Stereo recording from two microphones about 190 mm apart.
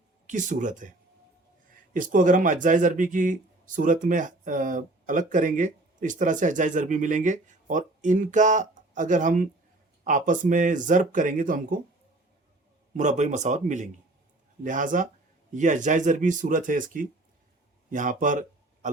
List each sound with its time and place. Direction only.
0.3 s speech: 40° right (ahead or behind)
12.9 s speech: 40° right (ahead or behind)